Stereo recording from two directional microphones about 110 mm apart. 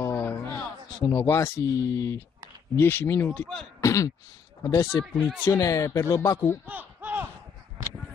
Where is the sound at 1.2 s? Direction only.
25° left (ahead or behind).